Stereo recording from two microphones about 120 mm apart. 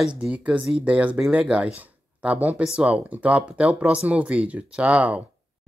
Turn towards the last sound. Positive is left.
turn(degrees=-10)  # may be behind; listen again after turning